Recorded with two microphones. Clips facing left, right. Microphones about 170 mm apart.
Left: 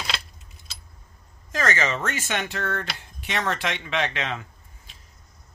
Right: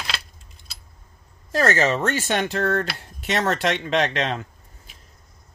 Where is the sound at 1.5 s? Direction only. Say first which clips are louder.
Right 5 dB; 40° right (ahead or behind).